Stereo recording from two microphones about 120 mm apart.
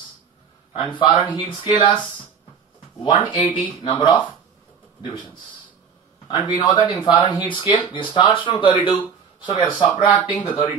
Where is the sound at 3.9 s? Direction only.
45° left (ahead or behind).